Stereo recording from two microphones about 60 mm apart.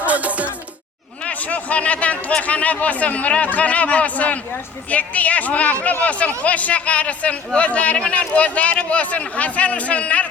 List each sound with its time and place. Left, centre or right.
0.0 s music: right
1.2 s a woman's voice: left